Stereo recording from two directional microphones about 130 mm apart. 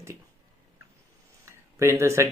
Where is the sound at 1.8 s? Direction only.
20° right (ahead or behind).